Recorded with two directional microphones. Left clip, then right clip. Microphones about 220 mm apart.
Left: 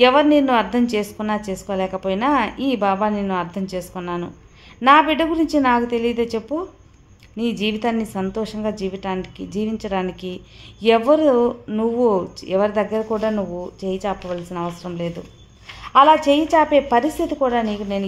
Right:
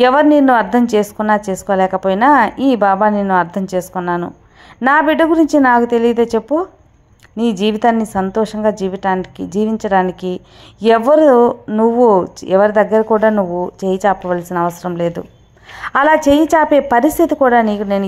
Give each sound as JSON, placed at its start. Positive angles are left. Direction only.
{"t": 0.0, "sound": "a woman's voice", "side_deg": -25}